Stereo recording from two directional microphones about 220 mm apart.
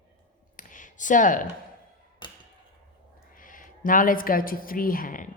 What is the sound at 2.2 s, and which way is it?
Chop, 20° left (ahead or behind).